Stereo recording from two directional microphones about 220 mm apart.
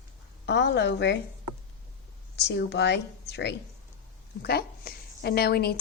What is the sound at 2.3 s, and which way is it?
A woman's voice, 50° left (ahead or behind).